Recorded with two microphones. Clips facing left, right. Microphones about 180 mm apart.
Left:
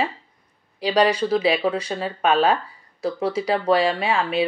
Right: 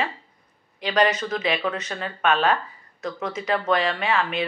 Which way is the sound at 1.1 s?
35° left (ahead or behind).